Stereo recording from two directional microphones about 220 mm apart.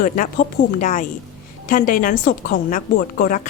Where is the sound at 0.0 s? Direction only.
35° left (ahead or behind).